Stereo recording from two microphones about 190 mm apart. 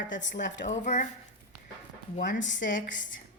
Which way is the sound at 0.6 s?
40° left (ahead or behind).